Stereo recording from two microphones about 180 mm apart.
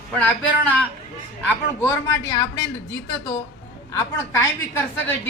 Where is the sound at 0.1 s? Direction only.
10° left (ahead or behind).